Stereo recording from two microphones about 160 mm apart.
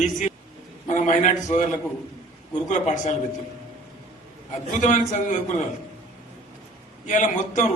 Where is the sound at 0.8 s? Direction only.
50° left (ahead or behind).